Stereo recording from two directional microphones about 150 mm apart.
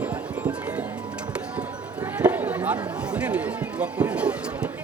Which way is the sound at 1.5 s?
10° right (ahead or behind).